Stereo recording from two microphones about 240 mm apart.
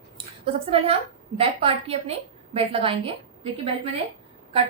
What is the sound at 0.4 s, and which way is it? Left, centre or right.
A woman's voice, right.